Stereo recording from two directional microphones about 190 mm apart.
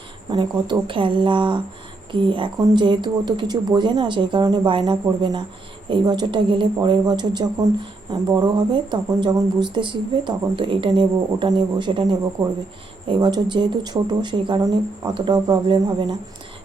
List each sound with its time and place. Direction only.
0.3 s speech: 20° right (ahead or behind)